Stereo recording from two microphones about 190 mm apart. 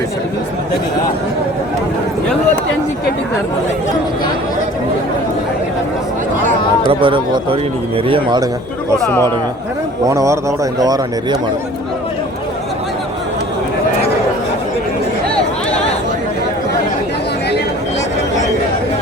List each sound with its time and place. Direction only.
6.8 s speech: 25° right (ahead or behind)
10.1 s speech: 15° right (ahead or behind)